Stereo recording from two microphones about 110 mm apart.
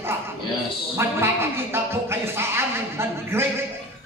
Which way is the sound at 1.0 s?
20° right (ahead or behind).